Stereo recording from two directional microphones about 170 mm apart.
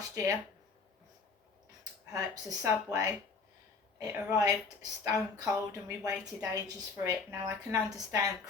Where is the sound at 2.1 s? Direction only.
20° right (ahead or behind).